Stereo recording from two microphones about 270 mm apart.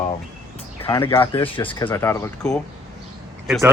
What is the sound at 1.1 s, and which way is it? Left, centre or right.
Speech, centre.